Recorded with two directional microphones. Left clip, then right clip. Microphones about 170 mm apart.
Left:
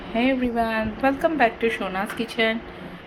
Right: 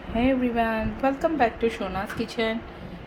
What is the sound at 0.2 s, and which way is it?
A woman's voice, 10° right (ahead or behind).